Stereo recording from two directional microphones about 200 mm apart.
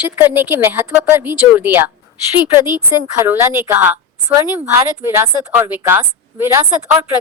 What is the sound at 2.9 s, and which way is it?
Speech, 15° right (ahead or behind).